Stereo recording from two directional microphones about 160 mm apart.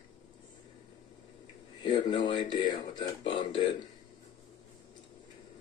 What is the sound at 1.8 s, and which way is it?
Speech, 30° left (ahead or behind).